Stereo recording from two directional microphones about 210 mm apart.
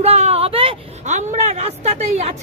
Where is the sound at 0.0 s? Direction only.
30° right (ahead or behind).